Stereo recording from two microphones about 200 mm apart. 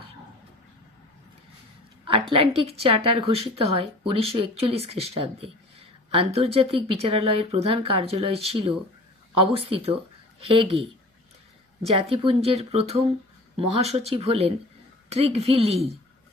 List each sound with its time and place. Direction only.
2.3 s speech: 30° right (ahead or behind)
11.9 s speech: 30° right (ahead or behind)